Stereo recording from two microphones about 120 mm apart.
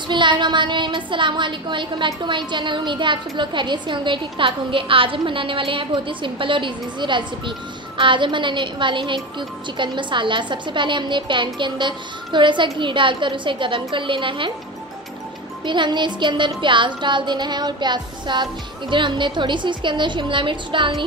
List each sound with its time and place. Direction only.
0.1 s a woman's voice: 40° right (ahead or behind)
15.6 s a woman's voice: 40° right (ahead or behind)